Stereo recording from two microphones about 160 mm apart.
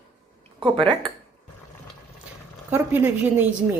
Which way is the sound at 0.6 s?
30° right (ahead or behind).